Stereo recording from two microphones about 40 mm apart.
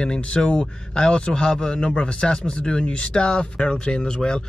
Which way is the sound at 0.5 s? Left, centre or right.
Left.